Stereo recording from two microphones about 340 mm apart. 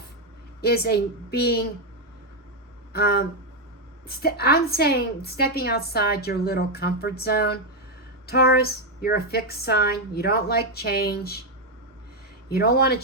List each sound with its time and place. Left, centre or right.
0.6 s a woman's voice: left
2.9 s a woman's voice: left
12.5 s a woman's voice: left